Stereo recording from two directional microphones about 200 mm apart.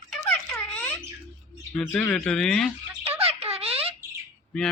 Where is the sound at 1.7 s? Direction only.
5° left (ahead or behind).